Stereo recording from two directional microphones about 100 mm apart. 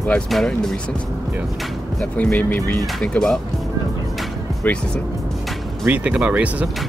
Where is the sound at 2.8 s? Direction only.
10° left (ahead or behind).